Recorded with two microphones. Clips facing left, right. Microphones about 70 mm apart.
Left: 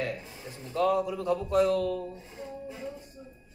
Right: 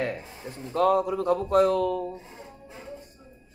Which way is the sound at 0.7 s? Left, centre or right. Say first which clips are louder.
Right 4 dB; right.